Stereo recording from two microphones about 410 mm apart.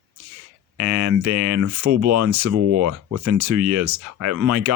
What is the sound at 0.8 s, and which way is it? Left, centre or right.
Speech, right.